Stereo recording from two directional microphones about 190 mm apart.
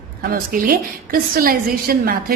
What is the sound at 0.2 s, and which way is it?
A woman's voice, 50° right (ahead or behind).